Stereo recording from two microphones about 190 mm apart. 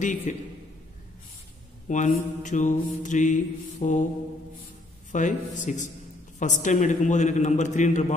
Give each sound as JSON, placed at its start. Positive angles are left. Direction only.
{"t": 0.0, "sound": "mantra", "side_deg": 40}
{"t": 1.9, "sound": "mantra", "side_deg": 40}
{"t": 5.1, "sound": "mantra", "side_deg": 40}